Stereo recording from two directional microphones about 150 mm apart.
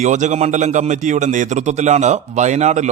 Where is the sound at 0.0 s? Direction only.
55° right (ahead or behind).